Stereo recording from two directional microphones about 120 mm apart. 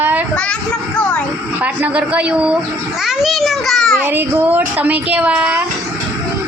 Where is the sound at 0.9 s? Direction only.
10° left (ahead or behind).